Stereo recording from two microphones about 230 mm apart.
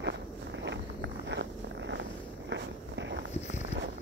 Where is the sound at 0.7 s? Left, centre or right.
Right.